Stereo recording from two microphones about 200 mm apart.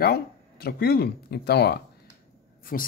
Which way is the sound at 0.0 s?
50° left (ahead or behind).